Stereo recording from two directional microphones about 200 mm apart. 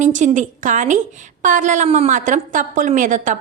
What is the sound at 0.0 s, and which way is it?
A woman's voice, 40° right (ahead or behind).